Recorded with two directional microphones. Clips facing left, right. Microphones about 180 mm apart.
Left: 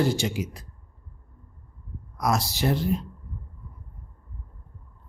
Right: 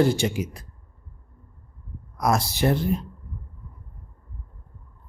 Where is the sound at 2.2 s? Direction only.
50° right (ahead or behind).